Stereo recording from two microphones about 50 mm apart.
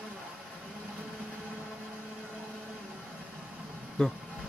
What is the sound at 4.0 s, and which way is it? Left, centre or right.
Speech, centre.